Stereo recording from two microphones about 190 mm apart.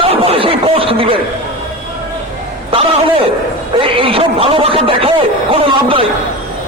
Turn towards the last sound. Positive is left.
turn(degrees=-30)  # may be behind; listen again after turning